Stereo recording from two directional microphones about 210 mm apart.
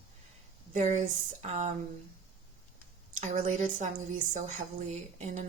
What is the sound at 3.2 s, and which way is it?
A woman's voice, 35° right (ahead or behind).